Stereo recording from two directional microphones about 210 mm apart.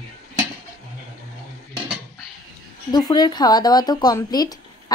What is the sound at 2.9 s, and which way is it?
Speech, 20° left (ahead or behind).